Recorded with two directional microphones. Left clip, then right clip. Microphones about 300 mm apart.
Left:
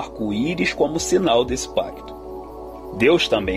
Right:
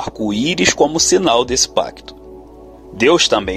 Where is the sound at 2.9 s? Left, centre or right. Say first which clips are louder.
Right 4 dB; centre.